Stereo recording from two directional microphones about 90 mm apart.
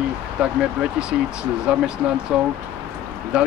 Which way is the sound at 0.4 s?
15° right (ahead or behind).